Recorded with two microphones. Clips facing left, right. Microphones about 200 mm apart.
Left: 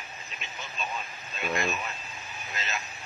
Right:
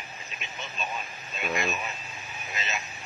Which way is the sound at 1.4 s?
Centre (ahead or behind).